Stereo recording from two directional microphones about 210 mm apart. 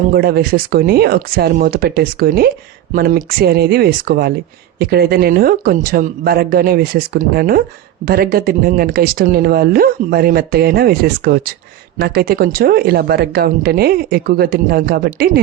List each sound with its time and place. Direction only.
0.1 s speech: 45° right (ahead or behind)